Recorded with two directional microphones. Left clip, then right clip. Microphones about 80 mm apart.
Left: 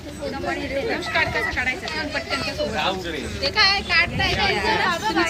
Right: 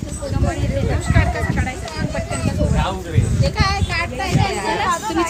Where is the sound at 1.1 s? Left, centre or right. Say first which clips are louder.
Left 2 dB; centre.